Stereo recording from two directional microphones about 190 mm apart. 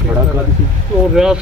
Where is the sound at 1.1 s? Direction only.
5° right (ahead or behind).